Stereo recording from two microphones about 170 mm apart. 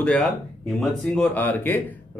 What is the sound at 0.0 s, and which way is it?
A man's voice, 5° left (ahead or behind).